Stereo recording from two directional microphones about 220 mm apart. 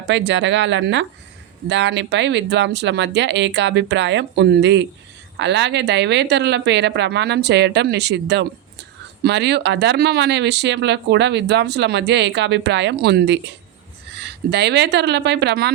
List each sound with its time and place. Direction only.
0.1 s speech: 55° right (ahead or behind)